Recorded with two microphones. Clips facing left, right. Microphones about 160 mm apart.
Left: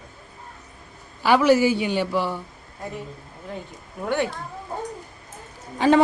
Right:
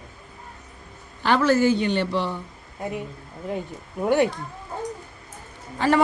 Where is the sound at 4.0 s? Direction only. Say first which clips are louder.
Right 5 dB; centre (ahead or behind).